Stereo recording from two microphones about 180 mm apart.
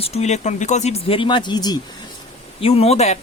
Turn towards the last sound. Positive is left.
turn(degrees=35)  # may be behind; listen again after turning